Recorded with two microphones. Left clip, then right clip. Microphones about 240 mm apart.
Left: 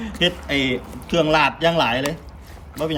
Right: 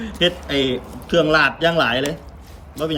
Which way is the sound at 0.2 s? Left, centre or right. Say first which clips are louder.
Right 2 dB; centre.